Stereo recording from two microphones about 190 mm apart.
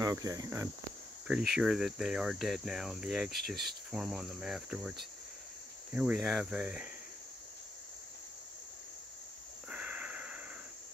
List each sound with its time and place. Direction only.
0.0 s speech: 20° right (ahead or behind)
1.2 s cricket: centre (ahead or behind)
9.7 s wheeze: 5° right (ahead or behind)